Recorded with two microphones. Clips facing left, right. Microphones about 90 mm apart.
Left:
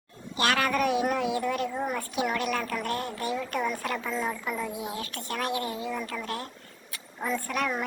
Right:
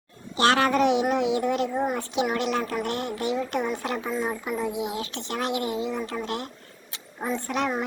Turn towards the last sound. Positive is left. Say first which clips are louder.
# right 2 dB
turn(degrees=-20)  # may be behind; listen again after turning